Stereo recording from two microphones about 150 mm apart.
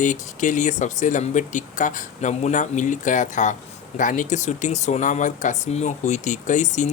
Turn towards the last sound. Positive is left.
turn(degrees=55)  # may be behind; listen again after turning